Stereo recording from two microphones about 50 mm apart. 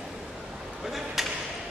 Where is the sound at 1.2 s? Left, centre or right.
Centre.